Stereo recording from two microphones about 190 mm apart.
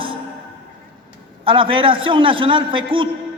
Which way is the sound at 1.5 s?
30° right (ahead or behind).